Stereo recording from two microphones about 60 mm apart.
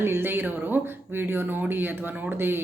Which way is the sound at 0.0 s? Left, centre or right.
Right.